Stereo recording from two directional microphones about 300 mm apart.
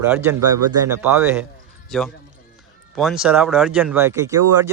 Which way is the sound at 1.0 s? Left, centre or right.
Centre.